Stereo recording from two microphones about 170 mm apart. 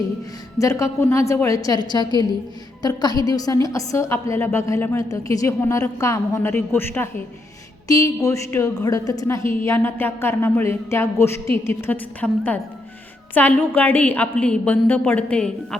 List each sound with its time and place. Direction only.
0.6 s a woman's voice: 20° left (ahead or behind)